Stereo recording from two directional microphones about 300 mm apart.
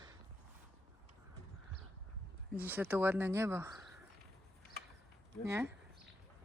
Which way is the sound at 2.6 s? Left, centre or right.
Centre.